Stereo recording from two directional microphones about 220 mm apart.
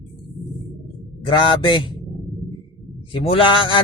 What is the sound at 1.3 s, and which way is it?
Speech, 20° left (ahead or behind).